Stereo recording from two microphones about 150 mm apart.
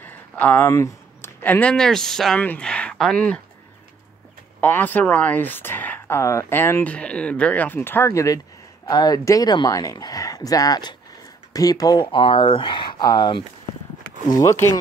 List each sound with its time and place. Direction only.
0.0 s speech: 10° left (ahead or behind)
4.6 s speech: 10° left (ahead or behind)